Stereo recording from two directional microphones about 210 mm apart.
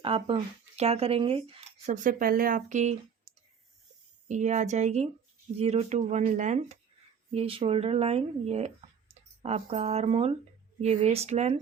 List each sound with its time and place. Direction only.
0.0 s speech: 25° right (ahead or behind)
1.9 s speech: 40° right (ahead or behind)
3.3 s clicking: 30° right (ahead or behind)
4.3 s speech: 35° right (ahead or behind)